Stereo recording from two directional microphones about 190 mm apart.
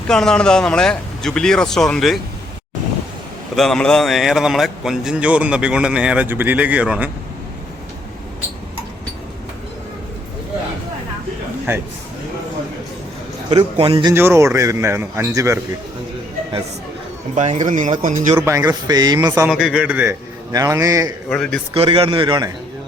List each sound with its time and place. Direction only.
0.1 s speech: 5° left (ahead or behind)
3.5 s speech: centre (ahead or behind)
11.7 s a man's voice: 10° right (ahead or behind)
13.5 s a man's voice: 30° right (ahead or behind)
14.1 s a man's voice: 15° right (ahead or behind)
17.3 s speech: 40° right (ahead or behind)
18.3 s a man's voice: 15° right (ahead or behind)
19.5 s a man's voice: 5° right (ahead or behind)
21.2 s speech: 5° left (ahead or behind)
21.7 s a man's voice: 25° right (ahead or behind)